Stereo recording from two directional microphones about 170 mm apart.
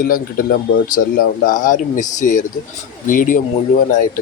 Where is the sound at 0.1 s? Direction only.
55° left (ahead or behind).